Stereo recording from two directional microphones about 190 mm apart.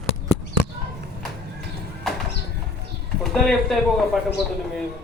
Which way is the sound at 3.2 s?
Centre (ahead or behind).